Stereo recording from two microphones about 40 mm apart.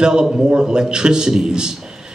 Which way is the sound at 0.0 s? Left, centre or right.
Centre.